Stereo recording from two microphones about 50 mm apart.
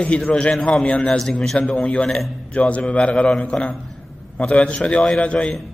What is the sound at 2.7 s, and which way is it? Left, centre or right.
A man's voice, left.